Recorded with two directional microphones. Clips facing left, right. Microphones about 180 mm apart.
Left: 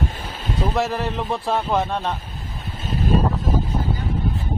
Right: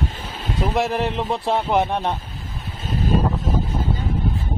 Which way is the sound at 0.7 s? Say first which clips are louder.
Right 3 dB; 15° right (ahead or behind).